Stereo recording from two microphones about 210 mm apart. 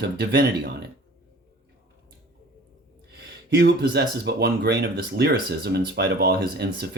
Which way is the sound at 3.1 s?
55° right (ahead or behind).